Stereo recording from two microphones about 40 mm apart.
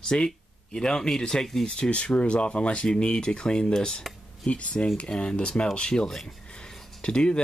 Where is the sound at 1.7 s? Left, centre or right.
Left.